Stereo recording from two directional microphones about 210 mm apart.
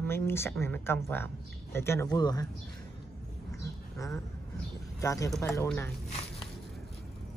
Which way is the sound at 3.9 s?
15° left (ahead or behind).